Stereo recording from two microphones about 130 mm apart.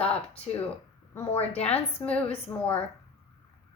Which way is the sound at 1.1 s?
20° left (ahead or behind).